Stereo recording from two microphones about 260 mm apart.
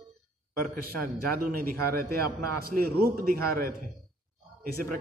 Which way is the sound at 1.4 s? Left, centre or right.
Right.